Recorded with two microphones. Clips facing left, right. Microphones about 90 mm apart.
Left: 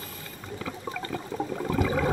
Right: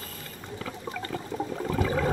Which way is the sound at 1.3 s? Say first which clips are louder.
Left 1 dB; 5° left (ahead or behind).